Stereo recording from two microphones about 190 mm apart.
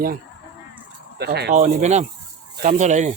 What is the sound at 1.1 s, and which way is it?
Speech, 60° right (ahead or behind).